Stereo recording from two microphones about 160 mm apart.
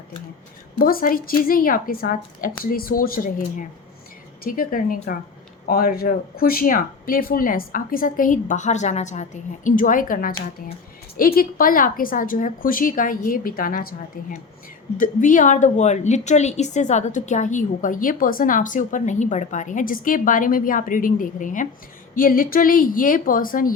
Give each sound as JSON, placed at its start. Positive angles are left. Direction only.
{"t": 0.8, "sound": "speech", "side_deg": 65}
{"t": 4.4, "sound": "speech", "side_deg": 60}
{"t": 14.9, "sound": "a woman's voice", "side_deg": 55}